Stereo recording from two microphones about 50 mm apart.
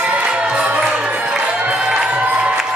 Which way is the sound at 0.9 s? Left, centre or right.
Right.